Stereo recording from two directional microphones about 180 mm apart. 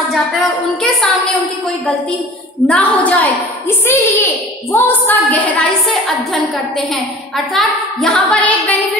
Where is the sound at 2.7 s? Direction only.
10° left (ahead or behind).